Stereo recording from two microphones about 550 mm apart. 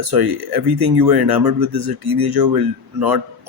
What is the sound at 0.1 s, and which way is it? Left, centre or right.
Speech, right.